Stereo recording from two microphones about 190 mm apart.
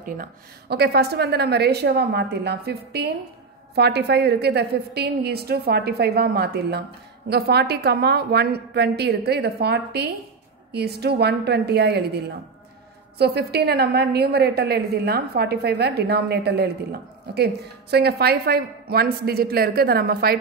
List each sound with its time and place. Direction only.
0.0 s a woman's voice: 50° right (ahead or behind)
13.2 s a woman's voice: 60° right (ahead or behind)